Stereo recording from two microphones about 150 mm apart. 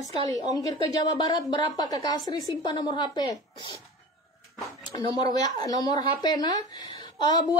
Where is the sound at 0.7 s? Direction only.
25° left (ahead or behind).